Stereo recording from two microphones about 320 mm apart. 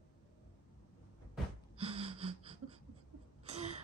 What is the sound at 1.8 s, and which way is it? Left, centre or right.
Gasp, centre.